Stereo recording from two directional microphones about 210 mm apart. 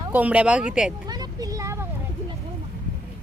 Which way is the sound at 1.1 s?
20° right (ahead or behind).